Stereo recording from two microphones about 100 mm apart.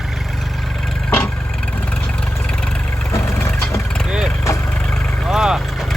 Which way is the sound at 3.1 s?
25° left (ahead or behind).